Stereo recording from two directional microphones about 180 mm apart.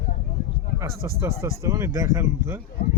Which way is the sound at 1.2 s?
15° right (ahead or behind).